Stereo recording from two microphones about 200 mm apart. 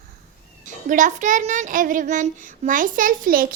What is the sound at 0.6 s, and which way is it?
A child's voice, 40° right (ahead or behind).